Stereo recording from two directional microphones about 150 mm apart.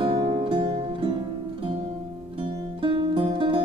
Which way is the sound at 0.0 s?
35° right (ahead or behind).